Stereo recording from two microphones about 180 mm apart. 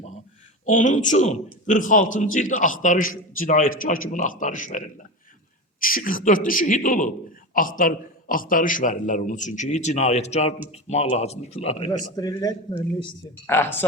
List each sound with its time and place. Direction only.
0.6 s a man's voice: 45° left (ahead or behind)
12.1 s speech: 20° left (ahead or behind)